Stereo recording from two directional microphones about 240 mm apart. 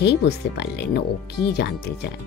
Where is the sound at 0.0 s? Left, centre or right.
Left.